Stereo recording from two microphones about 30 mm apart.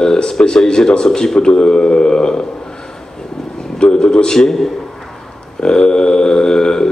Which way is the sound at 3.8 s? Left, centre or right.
Left.